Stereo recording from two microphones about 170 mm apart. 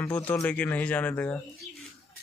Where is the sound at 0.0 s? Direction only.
10° left (ahead or behind).